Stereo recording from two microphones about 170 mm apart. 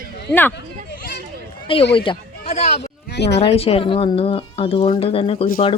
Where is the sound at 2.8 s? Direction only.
80° left.